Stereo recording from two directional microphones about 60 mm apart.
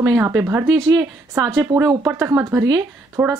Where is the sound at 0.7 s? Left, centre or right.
Right.